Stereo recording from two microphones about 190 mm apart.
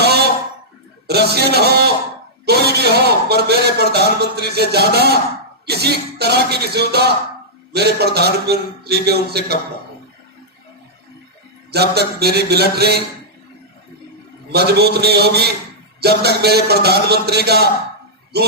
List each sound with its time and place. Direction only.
0.0 s a sound: 60° right (ahead or behind)
1.0 s a man's voice: 60° right (ahead or behind)
11.7 s a man's voice: 60° right (ahead or behind)
14.5 s a man's voice: 60° right (ahead or behind)